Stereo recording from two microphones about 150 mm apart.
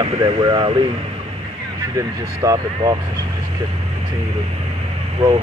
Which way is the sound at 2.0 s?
25° right (ahead or behind).